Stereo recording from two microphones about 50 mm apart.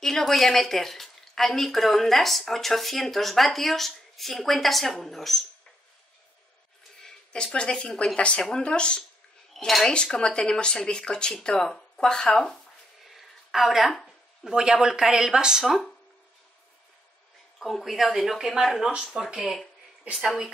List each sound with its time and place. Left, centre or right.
0.0 s a woman's voice: centre
7.0 s a sound: centre
7.5 s speech: left
9.6 s speech: centre
10.1 s speech: centre
13.1 s a sound: centre
14.5 s speech: centre
15.6 s a woman's voice: centre
17.6 s a woman's voice: centre